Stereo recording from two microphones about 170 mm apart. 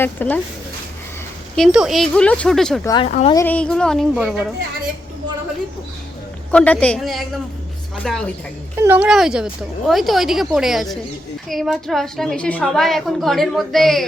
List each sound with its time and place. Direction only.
0.0 s speech: 10° left (ahead or behind)
1.5 s a woman's voice: centre (ahead or behind)
2.8 s speech: 25° left (ahead or behind)
3.3 s a woman's voice: 10° left (ahead or behind)
6.5 s a woman's voice: 5° left (ahead or behind)
8.8 s a woman's voice: 10° right (ahead or behind)